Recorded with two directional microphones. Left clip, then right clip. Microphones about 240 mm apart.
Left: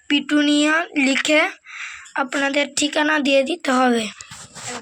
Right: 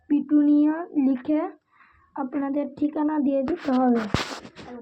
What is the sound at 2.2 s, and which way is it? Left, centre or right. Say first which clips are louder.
Speech: left 8 dB; left.